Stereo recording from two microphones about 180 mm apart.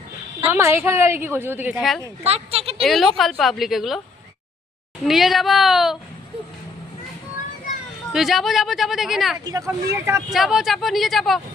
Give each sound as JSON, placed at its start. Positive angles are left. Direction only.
{"t": 0.4, "sound": "a woman's voice", "side_deg": -10}
{"t": 2.2, "sound": "speech", "side_deg": -35}
{"t": 2.8, "sound": "speech", "side_deg": 0}
{"t": 5.0, "sound": "speech", "side_deg": 0}
{"t": 8.1, "sound": "speech", "side_deg": 0}
{"t": 9.4, "sound": "a woman's voice", "side_deg": -20}
{"t": 10.2, "sound": "speech", "side_deg": 0}